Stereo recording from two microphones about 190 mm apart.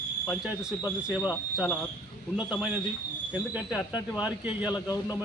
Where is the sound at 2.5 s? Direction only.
5° right (ahead or behind).